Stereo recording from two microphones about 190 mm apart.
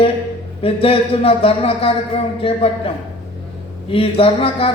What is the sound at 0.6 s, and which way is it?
A man's voice, 30° left (ahead or behind).